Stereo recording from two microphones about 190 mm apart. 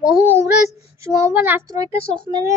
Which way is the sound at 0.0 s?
5° right (ahead or behind).